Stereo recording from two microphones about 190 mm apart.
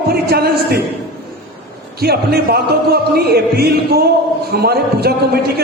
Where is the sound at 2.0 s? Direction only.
55° right (ahead or behind).